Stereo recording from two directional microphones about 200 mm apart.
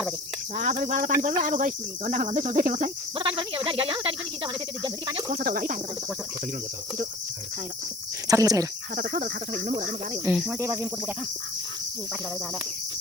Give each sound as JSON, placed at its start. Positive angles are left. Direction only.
{"t": 0.5, "sound": "cricket", "side_deg": -40}
{"t": 3.2, "sound": "speech", "side_deg": -25}
{"t": 5.3, "sound": "speech", "side_deg": -45}
{"t": 8.3, "sound": "speech", "side_deg": -15}
{"t": 9.0, "sound": "cricket", "side_deg": -40}
{"t": 10.2, "sound": "cricket", "side_deg": 0}
{"t": 10.6, "sound": "speech", "side_deg": -15}